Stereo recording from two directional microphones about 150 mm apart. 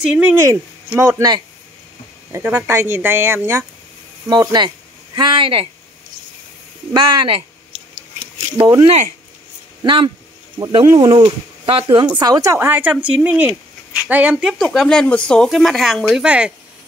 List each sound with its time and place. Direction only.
0.0 s speech: 10° right (ahead or behind)
4.3 s speech: 25° right (ahead or behind)
6.9 s speech: 35° right (ahead or behind)
8.8 s speech: 45° right (ahead or behind)
9.8 s a woman's voice: 35° right (ahead or behind)
12.2 s speech: 25° right (ahead or behind); by 16.5 s 5° right (ahead or behind)